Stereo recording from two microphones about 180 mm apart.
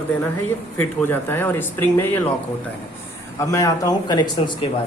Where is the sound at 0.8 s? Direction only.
10° left (ahead or behind).